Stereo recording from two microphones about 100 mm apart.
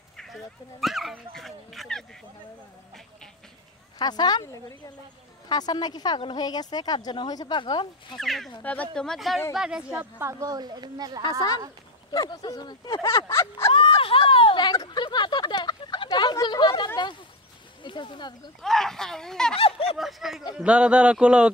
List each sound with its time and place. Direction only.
0.2 s speech: centre (ahead or behind)
4.0 s speech: 45° left (ahead or behind)
8.2 s a man's voice: centre (ahead or behind)
9.9 s a woman's voice: 20° right (ahead or behind)
10.4 s speech: 45° right (ahead or behind)
12.1 s speech: 40° left (ahead or behind)
13.0 s a sound: 30° left (ahead or behind)
13.7 s a sound: 65° left (ahead or behind); by 16.9 s 45° left (ahead or behind)
17.8 s speech: 50° left (ahead or behind)
18.6 s speech: 5° left (ahead or behind)
19.5 s speech: 70° left (ahead or behind)
20.0 s a man's voice: centre (ahead or behind)